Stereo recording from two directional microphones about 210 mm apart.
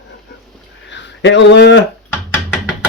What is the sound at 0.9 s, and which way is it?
Speech, 60° left (ahead or behind).